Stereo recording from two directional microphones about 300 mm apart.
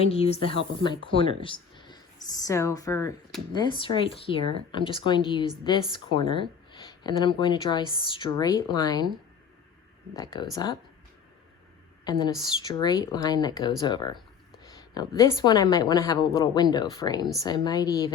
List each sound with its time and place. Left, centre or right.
0.0 s speech: centre
10.2 s speech: centre
12.6 s speech: centre